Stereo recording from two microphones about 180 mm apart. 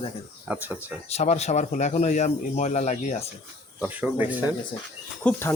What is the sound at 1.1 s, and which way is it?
Speech, 40° left (ahead or behind).